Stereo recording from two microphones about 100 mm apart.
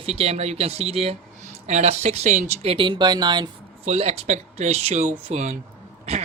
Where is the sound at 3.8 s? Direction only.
90° right.